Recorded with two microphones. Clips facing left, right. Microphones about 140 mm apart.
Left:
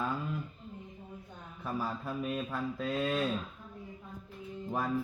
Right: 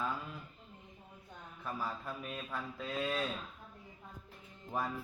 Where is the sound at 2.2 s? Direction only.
5° left (ahead or behind).